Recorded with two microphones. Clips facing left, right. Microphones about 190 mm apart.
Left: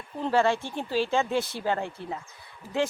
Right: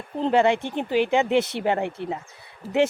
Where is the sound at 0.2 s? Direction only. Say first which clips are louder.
Right 4 dB; 20° right (ahead or behind).